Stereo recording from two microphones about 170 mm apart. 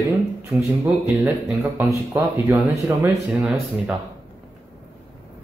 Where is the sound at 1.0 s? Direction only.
10° right (ahead or behind).